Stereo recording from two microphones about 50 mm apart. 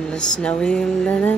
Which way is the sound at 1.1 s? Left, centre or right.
Left.